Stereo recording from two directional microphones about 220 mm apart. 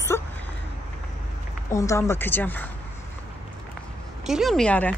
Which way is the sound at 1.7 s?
15° left (ahead or behind).